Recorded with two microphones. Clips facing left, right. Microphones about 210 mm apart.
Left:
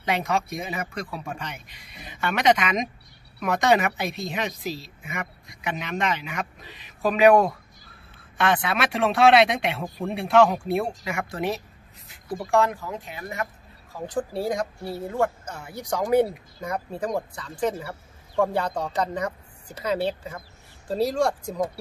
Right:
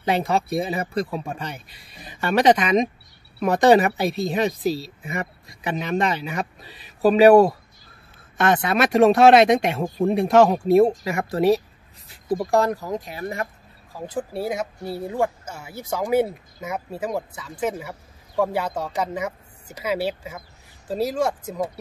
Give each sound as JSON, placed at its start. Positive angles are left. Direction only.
{"t": 0.0, "sound": "a woman's voice", "side_deg": -35}
{"t": 8.4, "sound": "a woman's voice", "side_deg": -45}
{"t": 13.9, "sound": "speech", "side_deg": -5}